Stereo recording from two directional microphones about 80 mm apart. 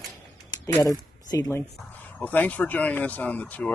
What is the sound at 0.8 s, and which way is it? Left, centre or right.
Speech, left.